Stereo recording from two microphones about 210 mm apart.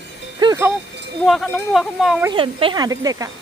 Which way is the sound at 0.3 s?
15° right (ahead or behind).